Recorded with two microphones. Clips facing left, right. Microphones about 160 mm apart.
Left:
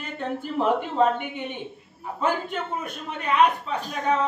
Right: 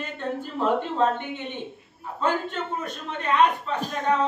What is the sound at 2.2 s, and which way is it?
A man's voice, 10° left (ahead or behind).